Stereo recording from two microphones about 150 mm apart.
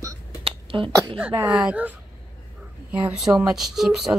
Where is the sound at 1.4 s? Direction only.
5° right (ahead or behind).